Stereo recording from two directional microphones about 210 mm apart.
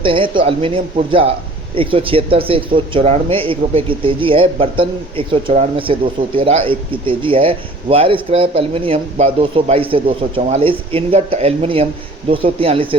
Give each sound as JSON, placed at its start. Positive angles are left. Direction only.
{"t": 0.0, "sound": "speech", "side_deg": -25}